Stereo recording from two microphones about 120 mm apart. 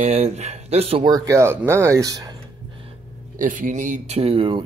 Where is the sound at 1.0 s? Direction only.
30° right (ahead or behind).